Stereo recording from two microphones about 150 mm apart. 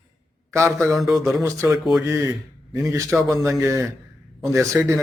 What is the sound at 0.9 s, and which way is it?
Speech, centre (ahead or behind).